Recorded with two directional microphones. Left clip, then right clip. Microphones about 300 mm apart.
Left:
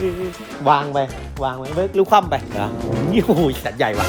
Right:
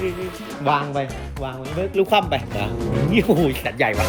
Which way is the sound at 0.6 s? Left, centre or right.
Centre.